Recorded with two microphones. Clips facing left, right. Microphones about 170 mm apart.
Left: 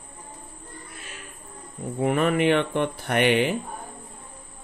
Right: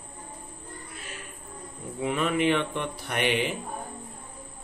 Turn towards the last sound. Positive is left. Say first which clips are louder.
# left 6 dB
turn(degrees=60)  # may be behind; listen again after turning